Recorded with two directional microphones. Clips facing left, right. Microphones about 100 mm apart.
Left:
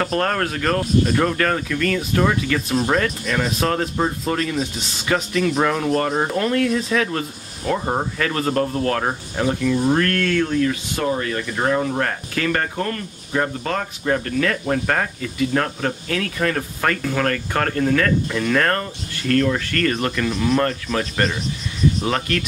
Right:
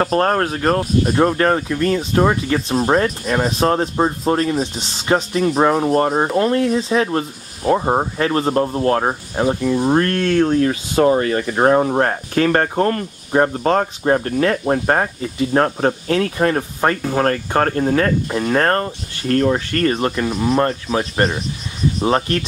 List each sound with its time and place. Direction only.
0.0 s speech: 30° right (ahead or behind)